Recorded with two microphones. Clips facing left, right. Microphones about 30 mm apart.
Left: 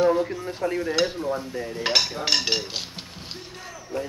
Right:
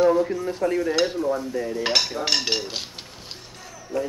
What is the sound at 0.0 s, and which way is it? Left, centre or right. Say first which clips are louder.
Speech: right 2 dB; centre.